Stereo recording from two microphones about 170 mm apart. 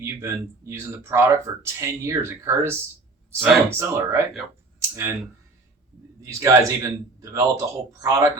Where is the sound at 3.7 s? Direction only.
15° right (ahead or behind).